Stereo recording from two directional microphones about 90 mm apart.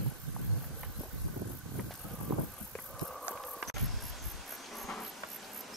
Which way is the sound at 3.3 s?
Centre (ahead or behind).